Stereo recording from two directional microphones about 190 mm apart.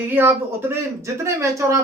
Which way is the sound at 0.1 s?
10° right (ahead or behind).